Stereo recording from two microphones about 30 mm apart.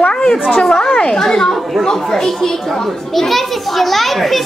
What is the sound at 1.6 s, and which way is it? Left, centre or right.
Speech, centre.